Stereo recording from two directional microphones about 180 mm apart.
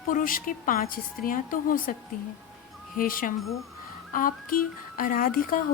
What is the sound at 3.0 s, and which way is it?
A woman's voice, 50° left (ahead or behind).